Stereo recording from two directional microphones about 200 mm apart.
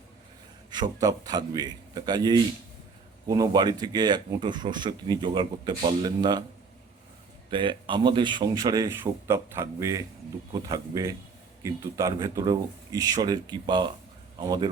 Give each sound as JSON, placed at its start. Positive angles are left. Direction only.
{"t": 0.7, "sound": "speech", "side_deg": -20}
{"t": 7.5, "sound": "a man's voice", "side_deg": -25}